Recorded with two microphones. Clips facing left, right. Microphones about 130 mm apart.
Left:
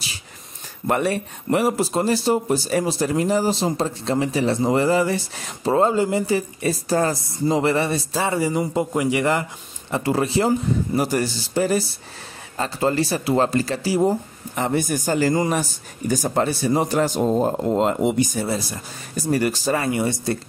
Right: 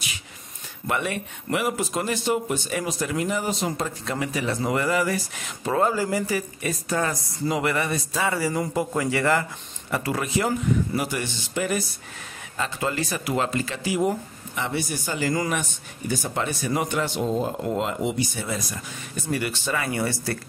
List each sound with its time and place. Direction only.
0.8 s a man's voice: 40° left (ahead or behind)
15.3 s speech: 30° left (ahead or behind)
18.0 s speech: 50° left (ahead or behind)
19.9 s a man's voice: 20° left (ahead or behind)